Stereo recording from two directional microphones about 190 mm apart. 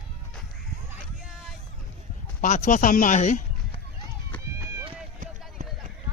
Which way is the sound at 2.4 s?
40° left (ahead or behind).